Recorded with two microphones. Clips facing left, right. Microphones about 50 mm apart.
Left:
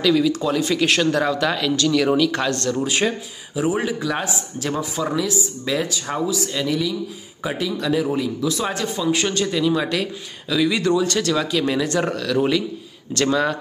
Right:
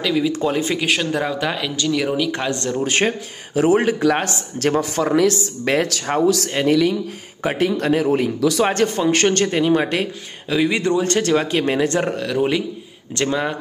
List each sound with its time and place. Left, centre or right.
0.0 s speech: centre
0.3 s speech: right
0.7 s speech: centre
2.8 s speech: right
3.5 s a man's voice: right
6.2 s speech: right
6.7 s a man's voice: right
8.4 s speech: right
8.6 s a man's voice: right
9.5 s speech: right